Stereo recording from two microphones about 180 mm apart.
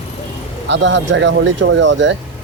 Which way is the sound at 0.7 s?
85° right.